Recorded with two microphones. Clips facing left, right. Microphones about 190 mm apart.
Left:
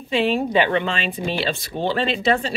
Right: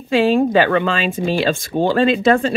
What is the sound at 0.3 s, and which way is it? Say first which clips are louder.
Speech: right 5 dB; 45° right (ahead or behind).